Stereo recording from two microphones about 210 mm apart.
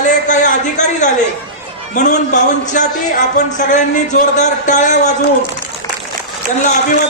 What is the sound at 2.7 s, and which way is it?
A man's voice, 35° left (ahead or behind).